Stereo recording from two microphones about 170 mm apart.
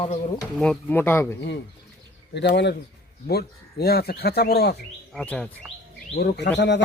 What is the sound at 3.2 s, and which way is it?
Speech, 65° left (ahead or behind).